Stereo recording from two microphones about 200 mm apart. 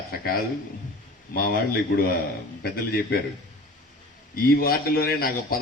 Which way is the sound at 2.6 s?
50° left (ahead or behind).